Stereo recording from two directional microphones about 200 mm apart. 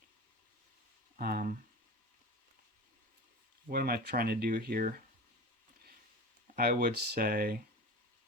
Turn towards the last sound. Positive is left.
turn(degrees=-45)  # may be behind; listen again after turning